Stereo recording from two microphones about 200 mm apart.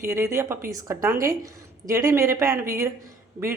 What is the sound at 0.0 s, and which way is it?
A woman's voice, 15° right (ahead or behind).